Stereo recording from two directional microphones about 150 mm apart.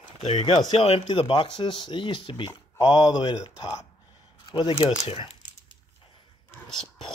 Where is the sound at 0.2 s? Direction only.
35° left (ahead or behind).